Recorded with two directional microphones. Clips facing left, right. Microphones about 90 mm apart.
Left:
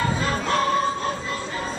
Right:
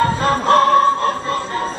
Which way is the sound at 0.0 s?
45° right (ahead or behind).